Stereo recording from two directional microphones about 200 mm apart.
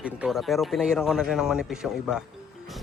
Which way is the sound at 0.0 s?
5° right (ahead or behind).